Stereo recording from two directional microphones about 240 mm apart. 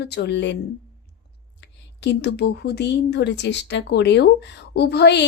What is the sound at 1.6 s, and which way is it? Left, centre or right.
A woman's voice, left.